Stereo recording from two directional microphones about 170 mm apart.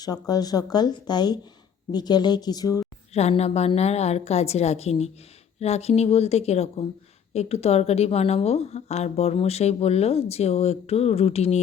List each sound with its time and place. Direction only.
0.0 s speech: 25° left (ahead or behind)
3.1 s speech: 40° left (ahead or behind)